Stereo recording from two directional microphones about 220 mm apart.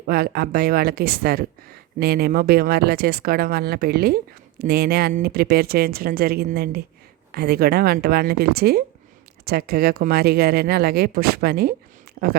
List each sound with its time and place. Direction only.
0.0 s speech: 45° right (ahead or behind)